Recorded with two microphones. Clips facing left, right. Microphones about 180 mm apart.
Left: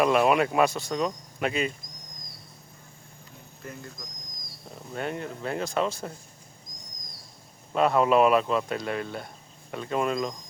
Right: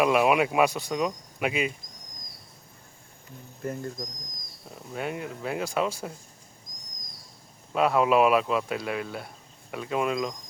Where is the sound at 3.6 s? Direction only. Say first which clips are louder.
Right 9 dB; 45° right (ahead or behind).